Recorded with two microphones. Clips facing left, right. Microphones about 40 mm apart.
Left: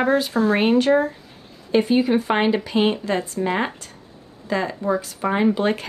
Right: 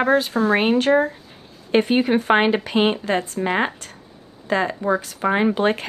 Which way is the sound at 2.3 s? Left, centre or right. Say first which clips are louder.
Right 2 dB; right.